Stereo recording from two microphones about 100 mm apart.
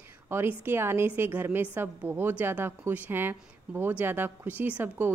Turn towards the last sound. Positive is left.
turn(degrees=-20)  # may be behind; listen again after turning